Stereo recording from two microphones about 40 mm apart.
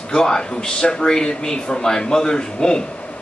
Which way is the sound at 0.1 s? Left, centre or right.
Centre.